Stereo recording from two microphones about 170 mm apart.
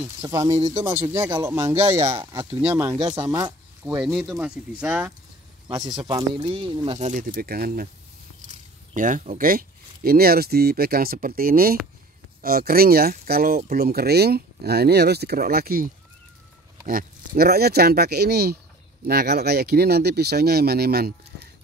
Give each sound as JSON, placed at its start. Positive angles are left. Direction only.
{"t": 0.3, "sound": "speech", "side_deg": -20}
{"t": 1.1, "sound": "speech", "side_deg": -15}
{"t": 4.0, "sound": "speech", "side_deg": 0}
{"t": 5.9, "sound": "speech", "side_deg": -25}
{"t": 7.0, "sound": "speech", "side_deg": -50}
{"t": 8.9, "sound": "speech", "side_deg": -50}